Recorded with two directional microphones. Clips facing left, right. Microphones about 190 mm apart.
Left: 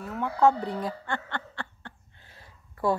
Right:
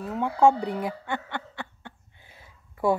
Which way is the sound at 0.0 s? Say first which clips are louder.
Right 2 dB; 15° right (ahead or behind).